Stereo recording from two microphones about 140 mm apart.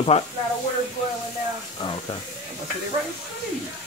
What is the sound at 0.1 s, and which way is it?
Speech, 50° left (ahead or behind).